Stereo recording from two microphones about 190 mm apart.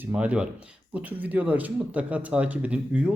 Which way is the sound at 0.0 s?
5° right (ahead or behind).